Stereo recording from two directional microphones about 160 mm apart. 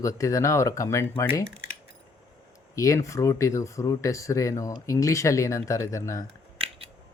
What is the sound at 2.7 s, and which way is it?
Speech, 20° left (ahead or behind).